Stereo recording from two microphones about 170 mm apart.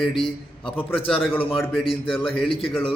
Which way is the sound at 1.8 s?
30° left (ahead or behind).